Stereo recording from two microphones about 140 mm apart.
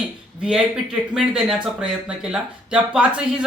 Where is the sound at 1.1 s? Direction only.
5° right (ahead or behind).